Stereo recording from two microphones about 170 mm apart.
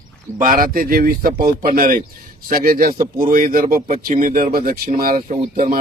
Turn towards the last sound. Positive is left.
turn(degrees=-55)  # may be behind; listen again after turning